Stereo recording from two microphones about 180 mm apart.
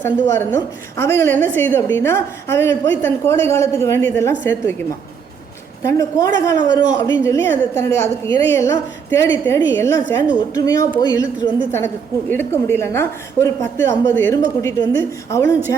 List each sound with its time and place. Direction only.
0.0 s a woman's voice: 15° left (ahead or behind)
12.3 s a woman's voice: 10° left (ahead or behind)